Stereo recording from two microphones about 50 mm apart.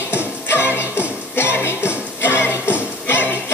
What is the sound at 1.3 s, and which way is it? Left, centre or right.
Music, left.